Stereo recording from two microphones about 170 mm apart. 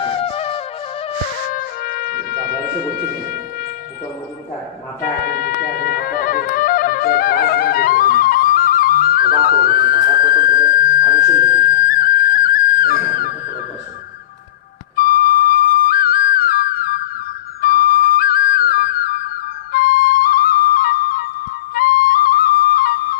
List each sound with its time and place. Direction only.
0.0 s flute: 35° left (ahead or behind)
1.5 s music: 55° left (ahead or behind)
5.2 s music: 60° left (ahead or behind)
10.2 s a sound: 55° left (ahead or behind)
11.7 s music: 55° left (ahead or behind)
14.9 s flute: 55° left (ahead or behind)